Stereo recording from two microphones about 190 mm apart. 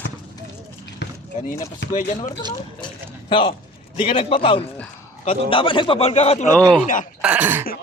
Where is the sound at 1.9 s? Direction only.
40° left (ahead or behind).